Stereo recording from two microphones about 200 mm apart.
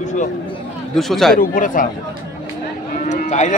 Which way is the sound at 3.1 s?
35° left (ahead or behind).